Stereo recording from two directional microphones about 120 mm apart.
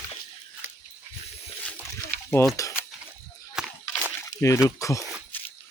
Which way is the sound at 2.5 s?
25° left (ahead or behind).